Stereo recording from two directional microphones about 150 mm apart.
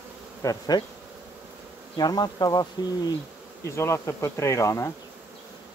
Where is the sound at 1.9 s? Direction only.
25° left (ahead or behind).